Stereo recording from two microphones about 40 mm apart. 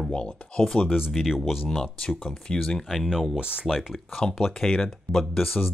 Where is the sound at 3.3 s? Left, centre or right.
Right.